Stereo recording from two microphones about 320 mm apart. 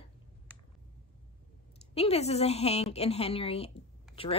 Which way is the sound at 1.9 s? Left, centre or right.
Centre.